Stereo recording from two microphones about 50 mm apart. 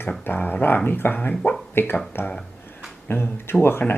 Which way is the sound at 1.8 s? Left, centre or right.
Left.